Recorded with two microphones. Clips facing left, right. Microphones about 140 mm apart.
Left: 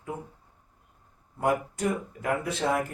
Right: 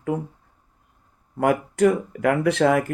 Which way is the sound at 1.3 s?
75° right (ahead or behind).